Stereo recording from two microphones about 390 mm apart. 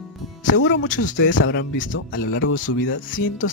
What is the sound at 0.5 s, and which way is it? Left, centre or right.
Speech, left.